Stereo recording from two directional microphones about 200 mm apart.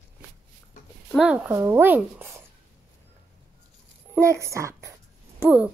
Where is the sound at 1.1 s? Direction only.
5° right (ahead or behind).